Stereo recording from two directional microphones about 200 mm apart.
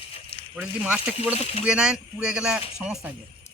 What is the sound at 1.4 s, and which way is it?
Speech, 30° left (ahead or behind).